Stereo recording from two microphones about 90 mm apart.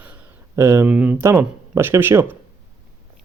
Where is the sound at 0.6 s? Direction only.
30° right (ahead or behind).